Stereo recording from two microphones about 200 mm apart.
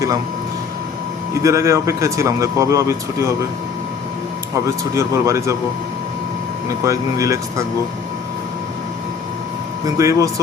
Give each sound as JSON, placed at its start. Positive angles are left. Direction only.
{"t": 1.4, "sound": "speech", "side_deg": -15}
{"t": 4.6, "sound": "speech", "side_deg": -15}
{"t": 6.8, "sound": "speech", "side_deg": -15}
{"t": 10.0, "sound": "speech", "side_deg": -15}